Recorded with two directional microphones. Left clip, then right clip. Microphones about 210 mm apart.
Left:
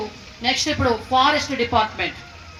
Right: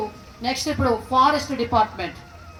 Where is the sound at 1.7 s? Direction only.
50° right (ahead or behind).